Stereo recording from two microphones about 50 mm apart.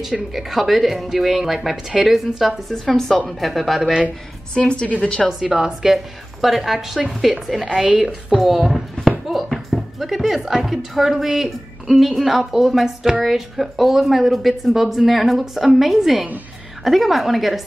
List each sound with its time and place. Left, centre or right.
0.0 s speech: centre
2.7 s a woman's voice: centre
4.6 s a woman's voice: centre
5.4 s a woman's voice: centre